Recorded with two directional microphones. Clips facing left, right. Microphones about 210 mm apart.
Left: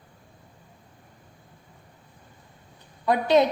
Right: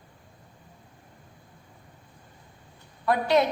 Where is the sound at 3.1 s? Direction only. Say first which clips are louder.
Left 3 dB; 20° left (ahead or behind).